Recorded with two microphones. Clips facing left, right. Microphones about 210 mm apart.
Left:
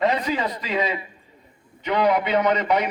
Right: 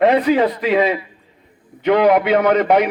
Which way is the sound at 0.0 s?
60° right (ahead or behind).